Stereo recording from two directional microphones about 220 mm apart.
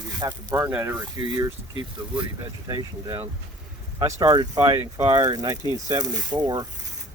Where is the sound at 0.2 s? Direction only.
15° right (ahead or behind).